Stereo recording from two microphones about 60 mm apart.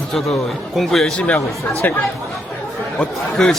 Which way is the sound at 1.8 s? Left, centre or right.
Left.